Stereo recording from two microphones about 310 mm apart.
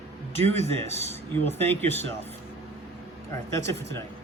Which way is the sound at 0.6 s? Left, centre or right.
Centre.